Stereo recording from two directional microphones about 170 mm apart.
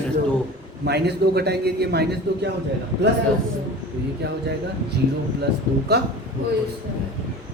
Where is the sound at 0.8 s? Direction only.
75° right (ahead or behind).